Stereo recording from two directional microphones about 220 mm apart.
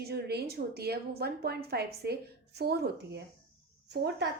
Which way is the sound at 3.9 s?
50° right (ahead or behind).